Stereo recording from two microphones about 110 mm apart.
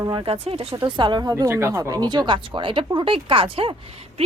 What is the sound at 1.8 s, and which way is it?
Speech, 35° right (ahead or behind).